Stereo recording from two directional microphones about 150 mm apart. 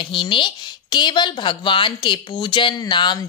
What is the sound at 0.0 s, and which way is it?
A woman's voice, 35° left (ahead or behind).